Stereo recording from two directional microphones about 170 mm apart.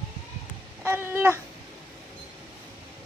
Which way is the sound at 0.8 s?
10° right (ahead or behind).